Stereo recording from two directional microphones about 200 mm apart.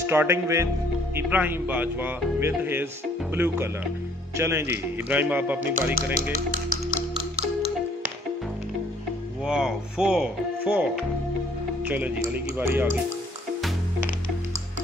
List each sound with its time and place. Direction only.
0.0 s speech: 10° right (ahead or behind)
6.3 s music: 45° right (ahead or behind)
9.5 s speech: 5° right (ahead or behind)